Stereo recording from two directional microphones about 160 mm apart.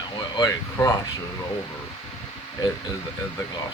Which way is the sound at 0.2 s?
25° left (ahead or behind).